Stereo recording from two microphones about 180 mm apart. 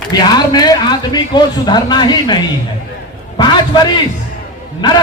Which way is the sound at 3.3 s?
25° left (ahead or behind).